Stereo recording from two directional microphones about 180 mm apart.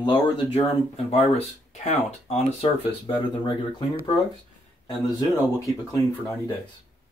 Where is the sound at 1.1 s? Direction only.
35° left (ahead or behind).